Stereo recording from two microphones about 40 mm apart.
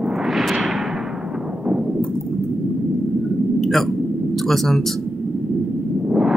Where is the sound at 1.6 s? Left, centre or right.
Centre.